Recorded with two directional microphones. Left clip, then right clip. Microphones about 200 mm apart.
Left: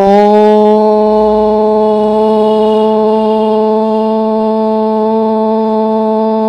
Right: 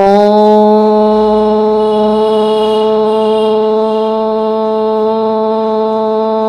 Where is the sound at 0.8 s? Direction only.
35° left (ahead or behind).